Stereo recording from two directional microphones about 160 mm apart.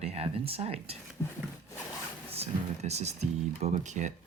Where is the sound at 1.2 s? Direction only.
15° left (ahead or behind).